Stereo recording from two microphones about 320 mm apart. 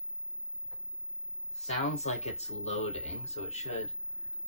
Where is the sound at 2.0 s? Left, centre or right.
Centre.